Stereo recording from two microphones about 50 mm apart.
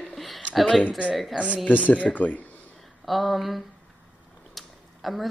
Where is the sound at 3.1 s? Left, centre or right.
Centre.